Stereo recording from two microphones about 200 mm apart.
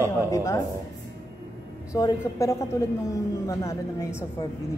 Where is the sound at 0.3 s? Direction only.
15° left (ahead or behind).